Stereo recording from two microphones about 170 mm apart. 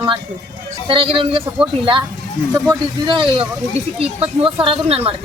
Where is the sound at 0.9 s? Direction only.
30° right (ahead or behind).